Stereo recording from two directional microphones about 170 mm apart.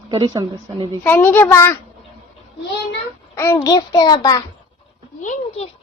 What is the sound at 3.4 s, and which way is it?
A child's voice, 20° left (ahead or behind).